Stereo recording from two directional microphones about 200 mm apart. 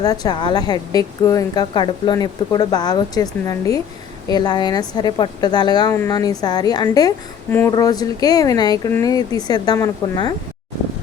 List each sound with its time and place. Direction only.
0.0 s a woman's voice: 20° left (ahead or behind)